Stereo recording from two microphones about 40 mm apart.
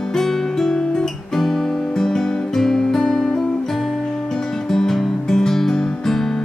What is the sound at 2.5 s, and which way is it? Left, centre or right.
Music, centre.